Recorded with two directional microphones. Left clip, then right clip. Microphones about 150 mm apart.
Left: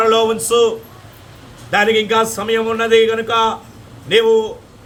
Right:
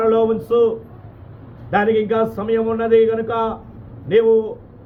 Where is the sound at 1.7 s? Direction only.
10° left (ahead or behind).